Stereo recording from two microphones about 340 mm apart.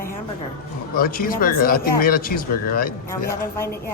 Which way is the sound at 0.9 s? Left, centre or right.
Left.